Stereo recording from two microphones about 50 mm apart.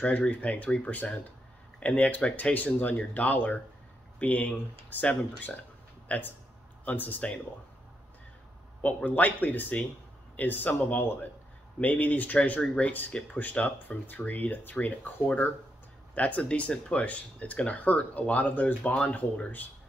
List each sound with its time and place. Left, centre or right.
0.0 s speech: left
6.0 s speech: left
8.8 s speech: left
16.2 s speech: left